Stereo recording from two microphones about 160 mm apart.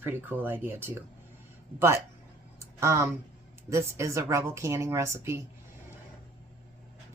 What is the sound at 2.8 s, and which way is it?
Speech, 15° right (ahead or behind).